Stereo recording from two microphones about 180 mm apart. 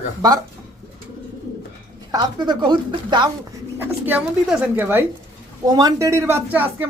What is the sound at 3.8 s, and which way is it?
Speech, 10° right (ahead or behind).